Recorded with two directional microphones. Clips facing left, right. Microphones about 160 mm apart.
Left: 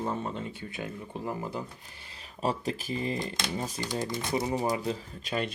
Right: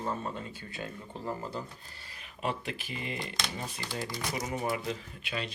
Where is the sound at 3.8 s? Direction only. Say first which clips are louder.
Left 2 dB; 20° left (ahead or behind); by 5.5 s 40° left (ahead or behind).